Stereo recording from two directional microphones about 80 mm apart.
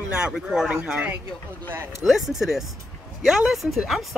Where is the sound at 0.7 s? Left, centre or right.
Centre.